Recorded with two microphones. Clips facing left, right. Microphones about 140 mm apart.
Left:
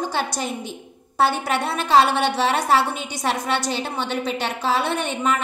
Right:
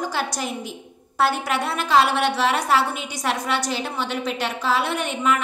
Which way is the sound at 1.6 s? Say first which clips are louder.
Left 2 dB; 25° left (ahead or behind).